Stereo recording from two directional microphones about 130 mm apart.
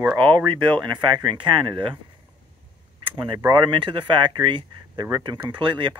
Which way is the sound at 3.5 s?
35° right (ahead or behind).